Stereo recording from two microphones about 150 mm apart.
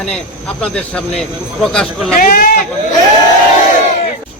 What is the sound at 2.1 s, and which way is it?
Speech, 70° left (ahead or behind).